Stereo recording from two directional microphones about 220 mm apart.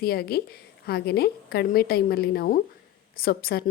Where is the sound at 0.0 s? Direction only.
45° left (ahead or behind).